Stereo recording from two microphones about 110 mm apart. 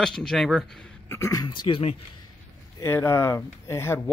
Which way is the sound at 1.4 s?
45° left (ahead or behind).